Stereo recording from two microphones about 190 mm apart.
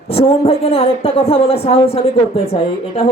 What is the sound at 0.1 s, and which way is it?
Speech, 30° left (ahead or behind).